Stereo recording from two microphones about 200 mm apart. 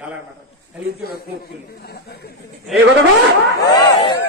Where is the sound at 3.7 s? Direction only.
20° left (ahead or behind).